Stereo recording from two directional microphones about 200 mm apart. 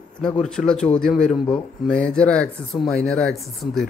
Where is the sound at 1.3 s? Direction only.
25° left (ahead or behind).